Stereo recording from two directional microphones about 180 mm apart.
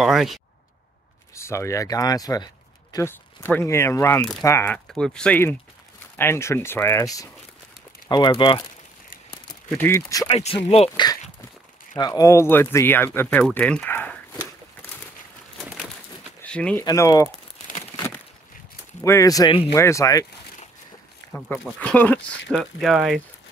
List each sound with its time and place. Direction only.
0.0 s speech: centre (ahead or behind)
1.3 s speech: 15° left (ahead or behind)
4.7 s speech: 5° left (ahead or behind); by 8.6 s 25° left (ahead or behind)
9.7 s speech: 15° left (ahead or behind)
10.3 s speech: 35° left (ahead or behind); by 14.5 s 10° left (ahead or behind)
15.7 s bird: 5° right (ahead or behind)
16.4 s speech: 5° left (ahead or behind)
16.8 s speech: 20° left (ahead or behind)
17.9 s a sound: 15° left (ahead or behind)
19.0 s speech: 20° left (ahead or behind)
21.3 s speech: 5° left (ahead or behind)
22.6 s speech: centre (ahead or behind)